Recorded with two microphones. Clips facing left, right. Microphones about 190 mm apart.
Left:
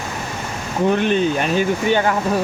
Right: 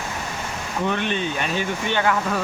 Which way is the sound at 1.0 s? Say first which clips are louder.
Left 7 dB; 45° left (ahead or behind).